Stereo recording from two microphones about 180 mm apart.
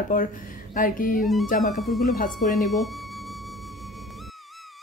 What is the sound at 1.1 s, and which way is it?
Speech, centre (ahead or behind).